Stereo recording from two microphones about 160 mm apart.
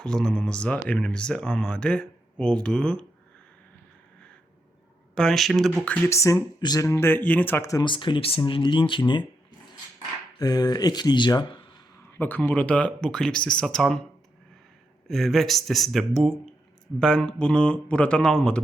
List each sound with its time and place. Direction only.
0.0 s speech: 5° left (ahead or behind)
5.1 s speech: 5° left (ahead or behind); by 9.2 s 30° left (ahead or behind)
10.3 s speech: 25° left (ahead or behind)
12.1 s speech: 10° left (ahead or behind)
15.0 s speech: centre (ahead or behind)